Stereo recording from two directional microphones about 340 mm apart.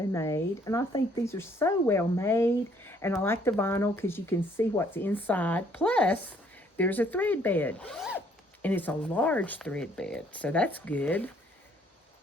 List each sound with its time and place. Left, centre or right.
0.1 s speech: centre